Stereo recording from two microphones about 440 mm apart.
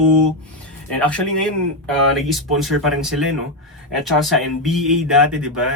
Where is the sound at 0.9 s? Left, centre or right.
Centre.